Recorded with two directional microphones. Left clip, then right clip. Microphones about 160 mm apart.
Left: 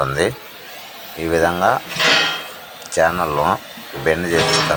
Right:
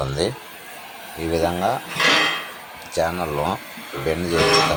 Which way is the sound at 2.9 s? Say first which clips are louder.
Left 6 dB; 10° left (ahead or behind).